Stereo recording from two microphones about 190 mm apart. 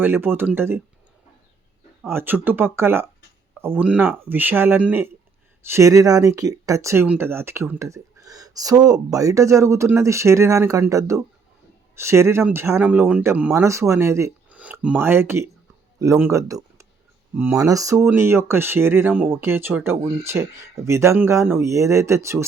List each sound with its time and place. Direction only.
0.0 s speech: 10° right (ahead or behind)
2.0 s speech: 10° right (ahead or behind)